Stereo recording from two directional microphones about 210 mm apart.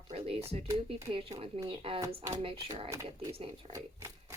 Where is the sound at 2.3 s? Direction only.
25° right (ahead or behind).